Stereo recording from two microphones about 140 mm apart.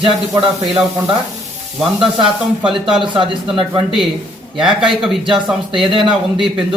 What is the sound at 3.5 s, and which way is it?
A man's voice, centre (ahead or behind).